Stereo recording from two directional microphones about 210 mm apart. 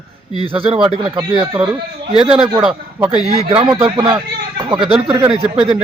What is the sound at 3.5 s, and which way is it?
Speech, 20° right (ahead or behind).